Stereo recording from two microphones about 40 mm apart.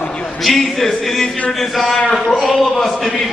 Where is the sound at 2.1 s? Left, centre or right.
Centre.